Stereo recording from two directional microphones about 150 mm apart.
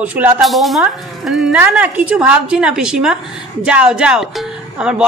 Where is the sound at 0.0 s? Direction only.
10° right (ahead or behind).